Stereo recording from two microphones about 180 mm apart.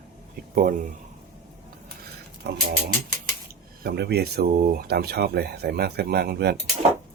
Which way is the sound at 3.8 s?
65° right (ahead or behind).